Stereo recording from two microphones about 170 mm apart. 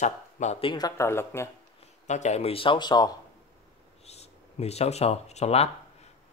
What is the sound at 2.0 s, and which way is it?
Speech, 45° left (ahead or behind).